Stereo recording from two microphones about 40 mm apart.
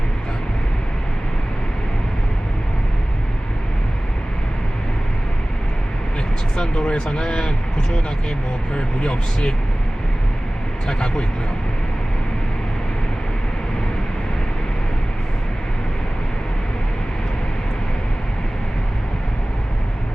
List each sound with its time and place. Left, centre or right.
6.7 s speech: left
8.7 s speech: left
10.8 s speech: centre